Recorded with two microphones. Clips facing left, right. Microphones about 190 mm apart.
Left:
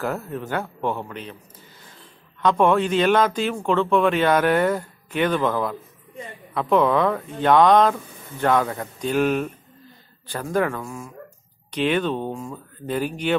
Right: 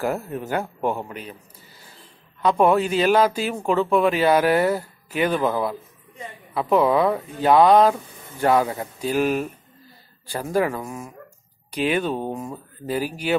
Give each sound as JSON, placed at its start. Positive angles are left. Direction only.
{"t": 0.0, "sound": "speech", "side_deg": -10}
{"t": 2.4, "sound": "speech", "side_deg": -10}
{"t": 10.8, "sound": "speech", "side_deg": -20}
{"t": 11.7, "sound": "speech", "side_deg": -10}
{"t": 12.3, "sound": "speech", "side_deg": -20}
{"t": 12.8, "sound": "speech", "side_deg": -5}